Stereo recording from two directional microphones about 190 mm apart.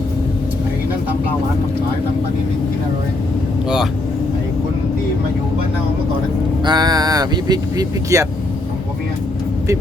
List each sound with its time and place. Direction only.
6.7 s speech: 20° right (ahead or behind)